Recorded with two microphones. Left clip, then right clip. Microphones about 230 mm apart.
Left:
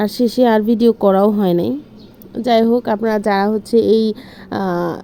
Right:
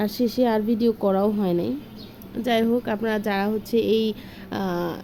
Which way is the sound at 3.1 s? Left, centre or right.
Centre.